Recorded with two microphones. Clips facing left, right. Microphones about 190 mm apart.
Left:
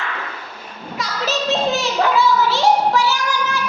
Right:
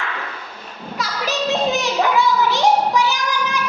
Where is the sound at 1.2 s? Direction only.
15° right (ahead or behind).